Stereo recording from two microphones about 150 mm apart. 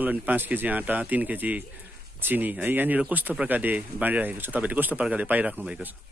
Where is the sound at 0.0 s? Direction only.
10° right (ahead or behind).